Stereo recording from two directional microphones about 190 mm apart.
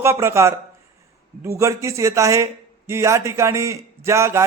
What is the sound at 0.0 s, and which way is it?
Speech, 15° right (ahead or behind).